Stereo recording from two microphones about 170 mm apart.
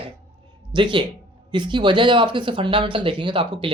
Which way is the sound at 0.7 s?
30° right (ahead or behind).